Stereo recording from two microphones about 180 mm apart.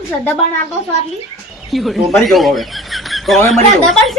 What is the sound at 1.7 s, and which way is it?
Speech, centre (ahead or behind).